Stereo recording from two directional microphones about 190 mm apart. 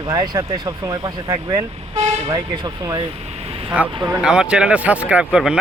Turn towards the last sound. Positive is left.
turn(degrees=-5)  # may be behind; listen again after turning